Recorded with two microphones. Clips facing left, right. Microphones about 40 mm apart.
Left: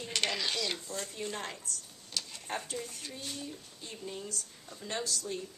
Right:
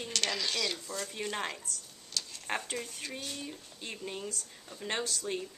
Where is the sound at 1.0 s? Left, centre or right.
Right.